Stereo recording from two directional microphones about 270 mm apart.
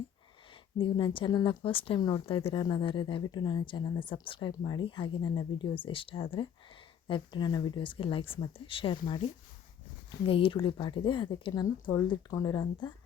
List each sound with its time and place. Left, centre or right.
0.8 s speech: centre